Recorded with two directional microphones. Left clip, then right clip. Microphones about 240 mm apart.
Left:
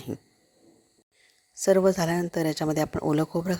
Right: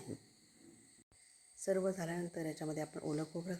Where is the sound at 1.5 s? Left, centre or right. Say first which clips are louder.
Left 15 dB; left.